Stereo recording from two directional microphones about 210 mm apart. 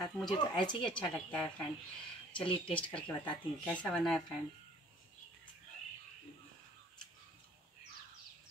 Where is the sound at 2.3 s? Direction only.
25° left (ahead or behind).